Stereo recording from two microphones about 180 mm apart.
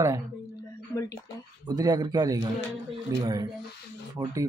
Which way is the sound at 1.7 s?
20° right (ahead or behind).